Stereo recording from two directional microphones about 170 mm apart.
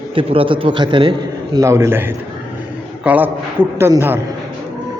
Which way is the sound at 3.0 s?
10° right (ahead or behind).